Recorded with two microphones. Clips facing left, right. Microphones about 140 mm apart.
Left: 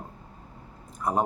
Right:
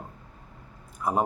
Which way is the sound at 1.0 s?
5° right (ahead or behind).